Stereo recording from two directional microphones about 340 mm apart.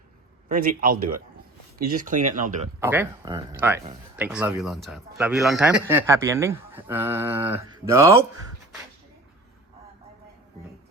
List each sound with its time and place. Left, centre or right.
0.4 s speech: right
2.8 s speech: centre